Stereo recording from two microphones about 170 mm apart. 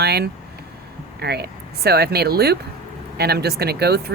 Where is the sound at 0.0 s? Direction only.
70° right (ahead or behind).